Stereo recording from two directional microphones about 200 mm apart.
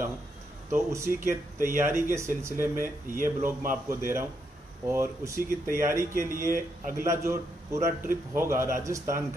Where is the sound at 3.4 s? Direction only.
45° right (ahead or behind).